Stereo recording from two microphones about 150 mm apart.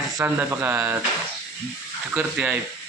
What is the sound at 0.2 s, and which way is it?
Speech, 15° right (ahead or behind).